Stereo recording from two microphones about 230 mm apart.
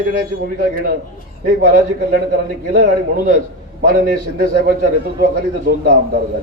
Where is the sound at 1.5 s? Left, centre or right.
Right.